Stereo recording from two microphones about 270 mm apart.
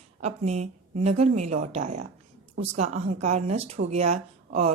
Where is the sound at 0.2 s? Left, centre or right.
Right.